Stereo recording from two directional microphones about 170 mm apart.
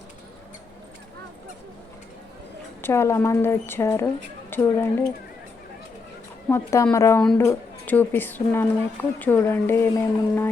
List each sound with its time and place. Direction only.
2.8 s a woman's voice: 15° left (ahead or behind)
6.5 s a woman's voice: 15° left (ahead or behind)